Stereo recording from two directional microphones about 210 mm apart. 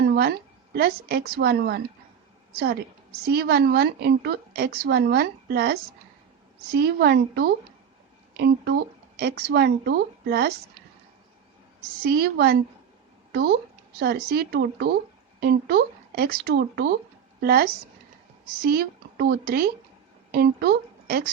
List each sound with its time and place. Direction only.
0.0 s a woman's voice: 50° right (ahead or behind)
11.8 s a woman's voice: 45° right (ahead or behind)